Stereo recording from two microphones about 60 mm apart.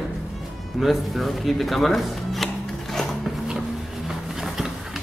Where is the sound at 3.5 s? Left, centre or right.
Centre.